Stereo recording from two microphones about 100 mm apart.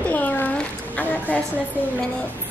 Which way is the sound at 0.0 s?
15° left (ahead or behind).